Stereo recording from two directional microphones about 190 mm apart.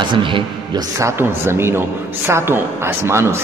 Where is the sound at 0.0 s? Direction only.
25° right (ahead or behind).